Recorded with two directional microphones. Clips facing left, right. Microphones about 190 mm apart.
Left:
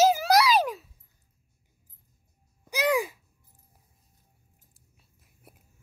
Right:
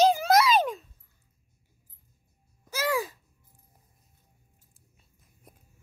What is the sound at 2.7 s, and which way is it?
Babbling, 15° left (ahead or behind).